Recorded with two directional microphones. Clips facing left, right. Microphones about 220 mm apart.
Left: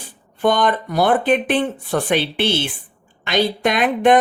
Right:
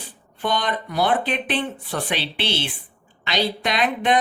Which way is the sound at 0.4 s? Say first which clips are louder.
Left 7 dB; 50° left (ahead or behind).